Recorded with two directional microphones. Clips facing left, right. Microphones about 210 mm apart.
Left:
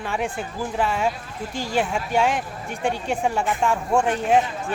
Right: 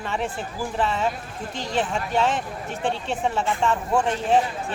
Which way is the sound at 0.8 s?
10° left (ahead or behind).